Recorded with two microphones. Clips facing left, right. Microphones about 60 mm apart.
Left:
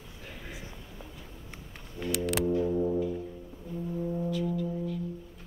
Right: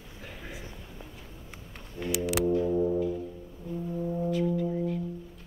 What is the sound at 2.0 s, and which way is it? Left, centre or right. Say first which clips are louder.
Music: right 1 dB; centre.